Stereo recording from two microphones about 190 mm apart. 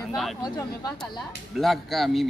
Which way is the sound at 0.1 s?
Centre (ahead or behind).